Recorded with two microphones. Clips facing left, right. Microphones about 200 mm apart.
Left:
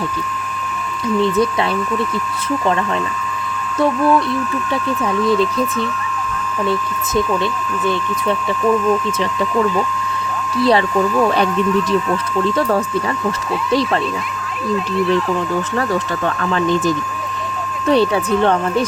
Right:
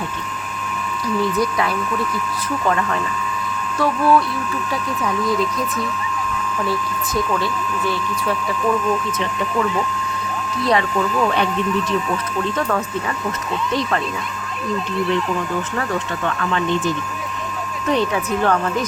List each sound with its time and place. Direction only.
1.2 s speech: 25° left (ahead or behind)
10.6 s speech: 30° left (ahead or behind)
12.5 s speech: 30° left (ahead or behind)
16.2 s speech: 40° left (ahead or behind)